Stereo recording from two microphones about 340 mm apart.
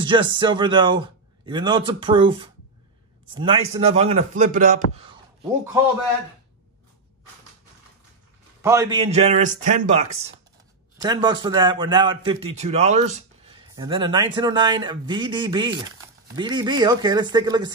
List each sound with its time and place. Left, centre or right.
0.0 s a man's voice: centre
8.6 s a man's voice: centre